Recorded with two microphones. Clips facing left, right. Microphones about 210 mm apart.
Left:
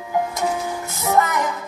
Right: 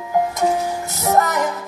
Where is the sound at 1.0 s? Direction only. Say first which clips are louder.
Right 2 dB; 40° right (ahead or behind).